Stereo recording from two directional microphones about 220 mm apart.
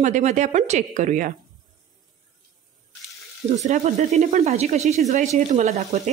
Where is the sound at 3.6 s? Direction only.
30° right (ahead or behind).